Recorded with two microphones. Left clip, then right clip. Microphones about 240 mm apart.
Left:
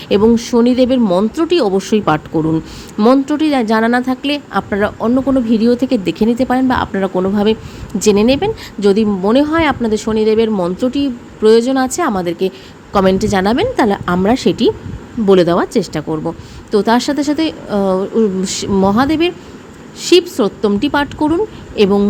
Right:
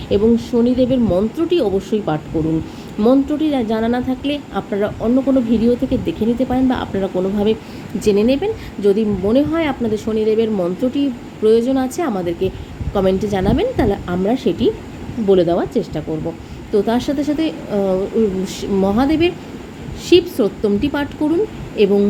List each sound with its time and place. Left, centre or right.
0.1 s a woman's voice: left